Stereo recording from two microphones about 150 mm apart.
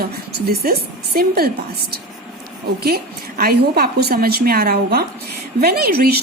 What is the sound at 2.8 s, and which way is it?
A woman's voice, 85° right.